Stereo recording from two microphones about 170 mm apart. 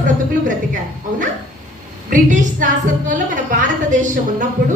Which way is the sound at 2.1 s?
50° right (ahead or behind).